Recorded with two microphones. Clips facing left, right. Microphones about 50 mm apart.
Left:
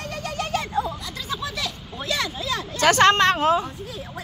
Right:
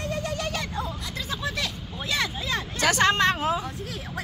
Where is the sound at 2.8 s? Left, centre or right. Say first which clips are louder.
Left 5 dB; left.